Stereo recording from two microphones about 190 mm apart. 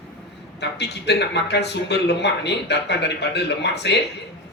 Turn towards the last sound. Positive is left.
turn(degrees=65)  # may be behind; listen again after turning